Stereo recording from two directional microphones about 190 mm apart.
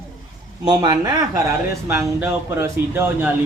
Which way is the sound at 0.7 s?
20° right (ahead or behind).